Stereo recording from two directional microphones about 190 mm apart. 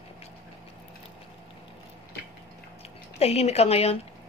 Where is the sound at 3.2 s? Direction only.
35° left (ahead or behind).